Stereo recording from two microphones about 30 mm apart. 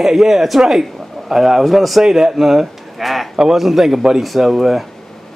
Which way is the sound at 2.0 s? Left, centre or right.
Centre.